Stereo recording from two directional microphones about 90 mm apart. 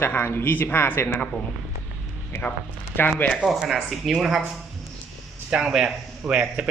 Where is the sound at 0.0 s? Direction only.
25° left (ahead or behind).